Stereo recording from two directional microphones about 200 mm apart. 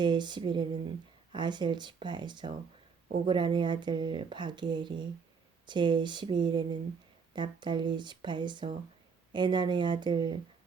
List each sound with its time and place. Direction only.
0.0 s speech: 20° right (ahead or behind)